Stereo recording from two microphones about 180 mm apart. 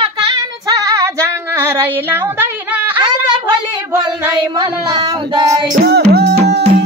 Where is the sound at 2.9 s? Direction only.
25° right (ahead or behind).